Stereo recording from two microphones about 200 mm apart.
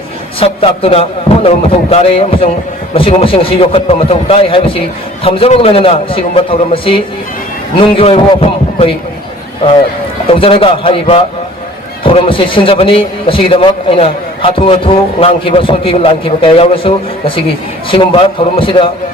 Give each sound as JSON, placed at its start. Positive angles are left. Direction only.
{"t": 0.3, "sound": "a man's voice", "side_deg": 30}
{"t": 10.2, "sound": "a man's voice", "side_deg": 25}